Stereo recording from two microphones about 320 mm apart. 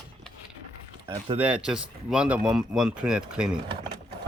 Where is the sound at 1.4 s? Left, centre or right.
Centre.